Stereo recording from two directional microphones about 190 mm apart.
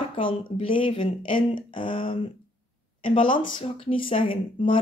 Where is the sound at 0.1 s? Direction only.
30° left (ahead or behind).